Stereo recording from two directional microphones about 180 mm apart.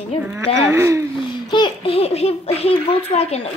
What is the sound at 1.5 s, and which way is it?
A child's voice, 25° left (ahead or behind).